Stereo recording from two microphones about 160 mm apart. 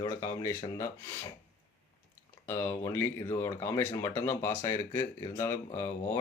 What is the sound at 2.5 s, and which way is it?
Speech, 15° left (ahead or behind).